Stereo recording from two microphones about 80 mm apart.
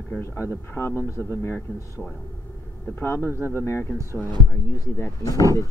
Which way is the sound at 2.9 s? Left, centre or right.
Left.